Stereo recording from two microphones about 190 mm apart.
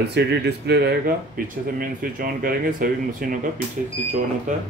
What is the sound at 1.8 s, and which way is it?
Speech, 45° right (ahead or behind).